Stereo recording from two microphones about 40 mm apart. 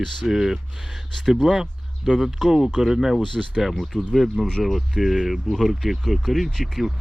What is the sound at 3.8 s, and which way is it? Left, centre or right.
Speech, centre.